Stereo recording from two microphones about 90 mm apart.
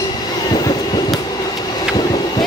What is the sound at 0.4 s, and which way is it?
Train, 50° left (ahead or behind).